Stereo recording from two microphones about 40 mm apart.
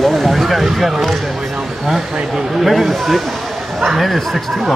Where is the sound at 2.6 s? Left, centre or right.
Centre.